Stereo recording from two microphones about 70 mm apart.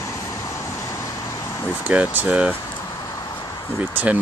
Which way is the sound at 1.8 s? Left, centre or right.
Centre.